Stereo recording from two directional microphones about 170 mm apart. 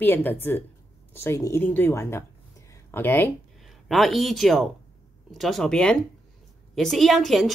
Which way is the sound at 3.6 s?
Centre (ahead or behind).